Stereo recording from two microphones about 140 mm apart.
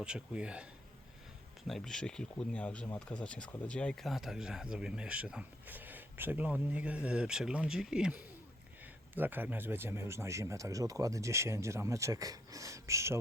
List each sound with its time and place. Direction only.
0.0 s speech: 5° right (ahead or behind)